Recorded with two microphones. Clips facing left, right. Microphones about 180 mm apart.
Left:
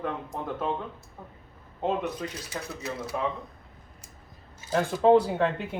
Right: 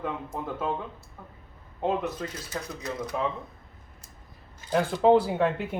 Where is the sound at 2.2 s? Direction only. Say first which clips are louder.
Even; 10° left (ahead or behind).